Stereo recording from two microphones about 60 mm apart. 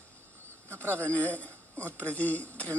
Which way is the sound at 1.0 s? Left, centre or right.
Left.